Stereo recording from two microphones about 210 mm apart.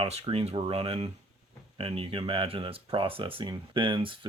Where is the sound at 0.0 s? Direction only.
30° right (ahead or behind).